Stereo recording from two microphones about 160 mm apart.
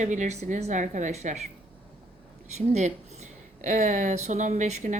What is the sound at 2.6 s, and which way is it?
A woman's voice, 45° right (ahead or behind).